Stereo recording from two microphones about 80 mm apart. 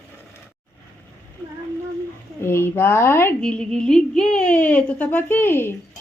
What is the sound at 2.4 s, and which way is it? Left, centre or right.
Speech, left.